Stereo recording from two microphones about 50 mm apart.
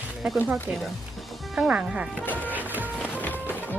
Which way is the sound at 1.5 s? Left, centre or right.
Centre.